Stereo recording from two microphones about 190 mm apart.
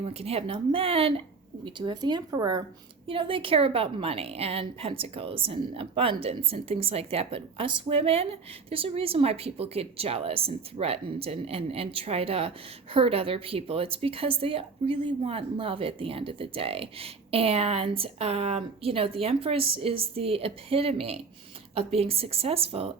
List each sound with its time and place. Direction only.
0.0 s a woman's voice: 30° right (ahead or behind)